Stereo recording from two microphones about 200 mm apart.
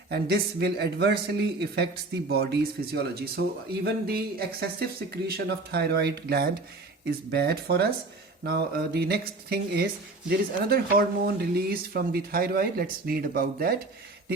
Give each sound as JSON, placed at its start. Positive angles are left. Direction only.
{"t": 0.1, "sound": "a man's voice", "side_deg": -55}